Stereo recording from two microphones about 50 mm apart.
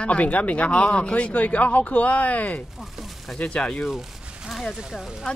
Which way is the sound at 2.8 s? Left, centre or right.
Centre.